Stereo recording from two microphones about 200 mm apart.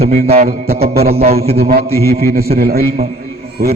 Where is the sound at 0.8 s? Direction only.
30° right (ahead or behind).